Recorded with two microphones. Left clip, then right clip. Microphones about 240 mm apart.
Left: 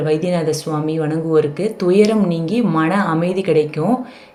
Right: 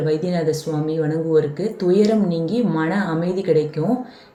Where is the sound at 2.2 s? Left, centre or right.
Left.